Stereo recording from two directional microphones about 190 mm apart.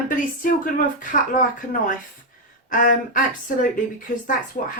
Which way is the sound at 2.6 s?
45° left (ahead or behind).